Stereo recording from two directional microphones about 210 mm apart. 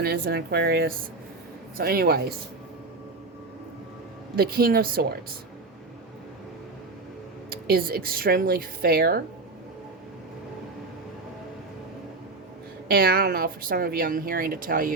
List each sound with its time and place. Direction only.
0.0 s a woman's voice: 45° right (ahead or behind)
4.4 s a woman's voice: 45° right (ahead or behind)
7.5 s a woman's voice: 45° right (ahead or behind)
12.9 s a woman's voice: 45° right (ahead or behind)